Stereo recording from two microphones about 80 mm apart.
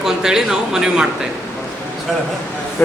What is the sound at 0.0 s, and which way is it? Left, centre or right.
Speech, centre.